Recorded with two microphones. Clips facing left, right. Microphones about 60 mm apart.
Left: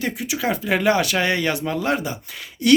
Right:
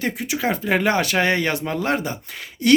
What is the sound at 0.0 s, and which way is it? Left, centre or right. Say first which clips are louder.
Speech: right 1 dB; right.